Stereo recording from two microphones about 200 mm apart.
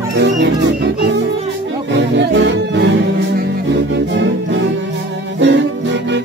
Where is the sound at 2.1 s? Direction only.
65° right (ahead or behind).